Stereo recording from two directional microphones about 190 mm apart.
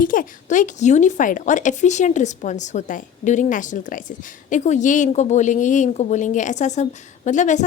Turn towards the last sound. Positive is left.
turn(degrees=40)  # may be behind; listen again after turning